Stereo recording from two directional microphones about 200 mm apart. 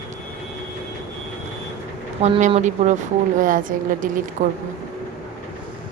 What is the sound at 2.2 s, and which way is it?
Speech, 30° right (ahead or behind).